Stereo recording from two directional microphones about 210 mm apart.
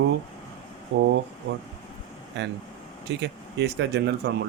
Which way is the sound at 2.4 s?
55° right (ahead or behind).